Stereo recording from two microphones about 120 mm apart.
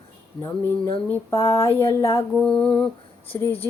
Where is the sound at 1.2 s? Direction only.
25° left (ahead or behind).